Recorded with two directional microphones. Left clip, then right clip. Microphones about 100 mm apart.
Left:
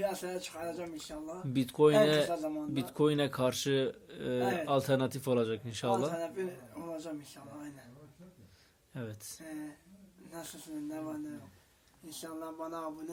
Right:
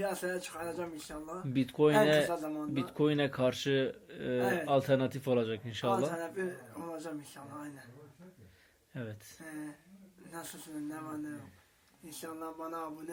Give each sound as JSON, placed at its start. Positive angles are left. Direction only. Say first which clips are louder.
{"t": 0.0, "sound": "speech", "louder": "even", "side_deg": 5}
{"t": 1.5, "sound": "speech", "louder": "left 2 dB", "side_deg": 35}
{"t": 2.3, "sound": "speech", "louder": "left 1 dB", "side_deg": 15}
{"t": 2.7, "sound": "speech", "louder": "left 1 dB", "side_deg": 35}
{"t": 6.1, "sound": "speech", "louder": "even", "side_deg": 10}
{"t": 9.0, "sound": "speech", "louder": "even", "side_deg": 30}
{"t": 10.8, "sound": "speech", "louder": "left 3 dB", "side_deg": 10}
{"t": 12.2, "sound": "speech", "louder": "even", "side_deg": 15}